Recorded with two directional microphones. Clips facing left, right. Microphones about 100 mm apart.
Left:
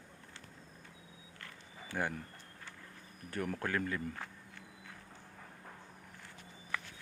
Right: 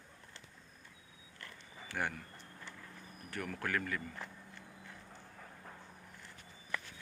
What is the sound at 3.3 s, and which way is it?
Speech, 30° left (ahead or behind).